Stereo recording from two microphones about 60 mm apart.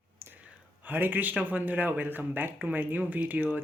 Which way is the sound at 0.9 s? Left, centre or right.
Right.